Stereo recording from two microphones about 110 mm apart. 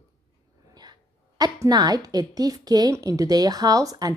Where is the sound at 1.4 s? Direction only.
35° right (ahead or behind).